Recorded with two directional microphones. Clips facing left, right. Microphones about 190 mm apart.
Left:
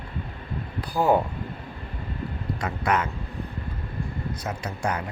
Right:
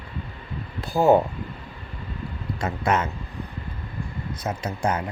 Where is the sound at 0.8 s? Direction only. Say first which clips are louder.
Right 4 dB; 25° right (ahead or behind).